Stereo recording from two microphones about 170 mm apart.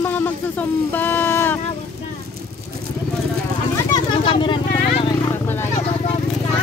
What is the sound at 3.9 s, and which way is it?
Vehicle, 30° left (ahead or behind).